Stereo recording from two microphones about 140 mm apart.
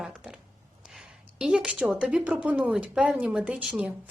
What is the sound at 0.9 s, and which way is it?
A woman's voice, 5° right (ahead or behind).